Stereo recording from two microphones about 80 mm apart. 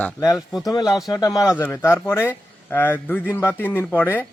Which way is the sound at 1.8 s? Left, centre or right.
Left.